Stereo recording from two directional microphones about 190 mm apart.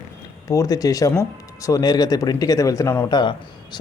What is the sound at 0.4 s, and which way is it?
Speech, 20° left (ahead or behind).